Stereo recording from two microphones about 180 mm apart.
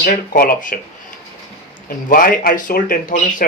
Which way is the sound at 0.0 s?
55° left (ahead or behind).